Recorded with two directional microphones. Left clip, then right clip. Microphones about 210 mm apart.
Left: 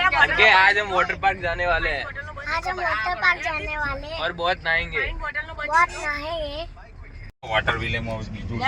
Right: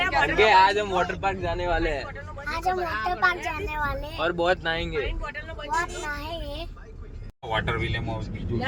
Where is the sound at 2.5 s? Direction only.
5° right (ahead or behind).